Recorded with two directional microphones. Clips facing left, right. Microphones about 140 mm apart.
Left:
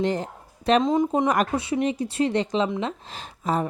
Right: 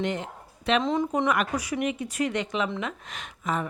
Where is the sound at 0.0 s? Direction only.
35° left (ahead or behind).